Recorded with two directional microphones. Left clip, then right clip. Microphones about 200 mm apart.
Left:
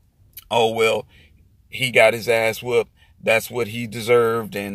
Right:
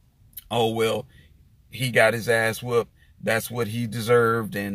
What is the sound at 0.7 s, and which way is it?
Speech, 15° right (ahead or behind).